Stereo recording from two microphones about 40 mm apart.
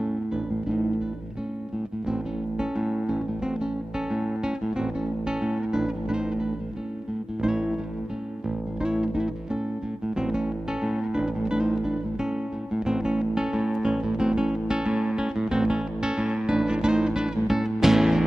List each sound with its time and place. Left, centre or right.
0.0 s music: centre
2.0 s music: centre
8.8 s music: centre